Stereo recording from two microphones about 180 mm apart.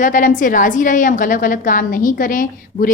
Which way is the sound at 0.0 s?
50° left (ahead or behind).